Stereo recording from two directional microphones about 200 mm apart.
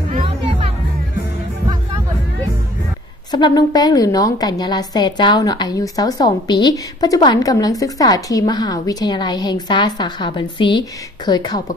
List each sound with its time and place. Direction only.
0.1 s music: 30° right (ahead or behind)
3.3 s a woman's voice: 20° left (ahead or behind)